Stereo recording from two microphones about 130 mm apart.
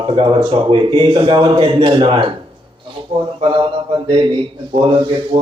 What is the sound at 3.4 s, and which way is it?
Mantra, 45° right (ahead or behind).